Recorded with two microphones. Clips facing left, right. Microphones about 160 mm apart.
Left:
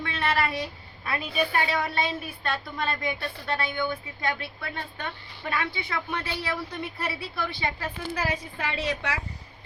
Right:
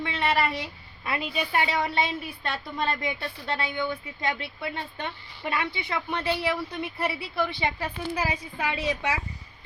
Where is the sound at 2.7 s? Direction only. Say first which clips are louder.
Right 1 dB; 20° right (ahead or behind).